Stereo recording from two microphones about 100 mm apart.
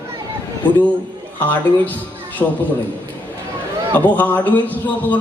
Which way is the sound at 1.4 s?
15° left (ahead or behind).